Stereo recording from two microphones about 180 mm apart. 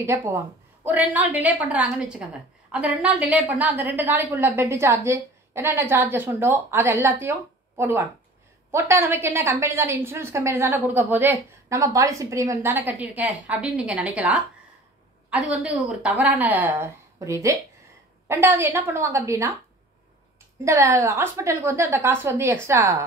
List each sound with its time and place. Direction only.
0.0 s a woman's voice: 15° right (ahead or behind)
20.6 s a woman's voice: 15° right (ahead or behind)